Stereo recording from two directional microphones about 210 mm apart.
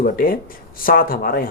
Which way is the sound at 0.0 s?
45° left (ahead or behind).